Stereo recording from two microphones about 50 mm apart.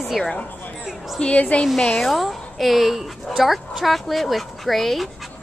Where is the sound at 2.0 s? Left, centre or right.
Centre.